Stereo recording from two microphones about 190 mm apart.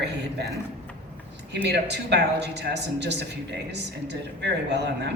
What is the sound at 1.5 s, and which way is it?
A woman's voice, 65° right (ahead or behind).